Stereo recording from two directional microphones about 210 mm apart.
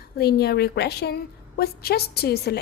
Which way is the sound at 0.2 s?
50° left (ahead or behind).